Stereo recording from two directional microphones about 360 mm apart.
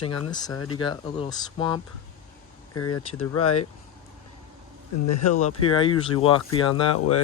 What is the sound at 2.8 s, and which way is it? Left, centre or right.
Speech, left.